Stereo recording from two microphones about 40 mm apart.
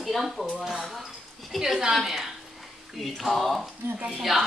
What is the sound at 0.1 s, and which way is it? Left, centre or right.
Speech, centre.